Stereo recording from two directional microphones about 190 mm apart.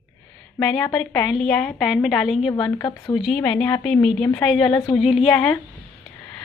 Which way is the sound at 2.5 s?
20° left (ahead or behind).